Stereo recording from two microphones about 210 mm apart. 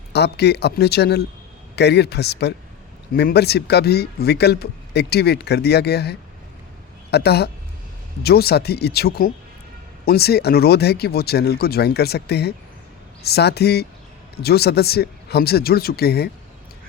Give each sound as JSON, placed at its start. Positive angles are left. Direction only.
{"t": 0.1, "sound": "speech", "side_deg": 50}